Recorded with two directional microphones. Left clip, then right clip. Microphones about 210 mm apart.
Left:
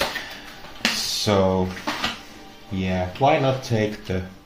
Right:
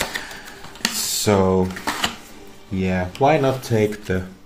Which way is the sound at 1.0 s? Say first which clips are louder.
Right 3 dB; 25° right (ahead or behind).